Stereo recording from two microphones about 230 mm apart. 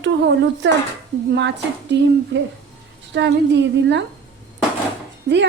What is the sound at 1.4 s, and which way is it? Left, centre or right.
Speech, right.